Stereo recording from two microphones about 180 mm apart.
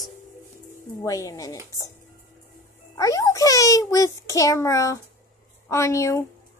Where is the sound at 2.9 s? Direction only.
20° left (ahead or behind).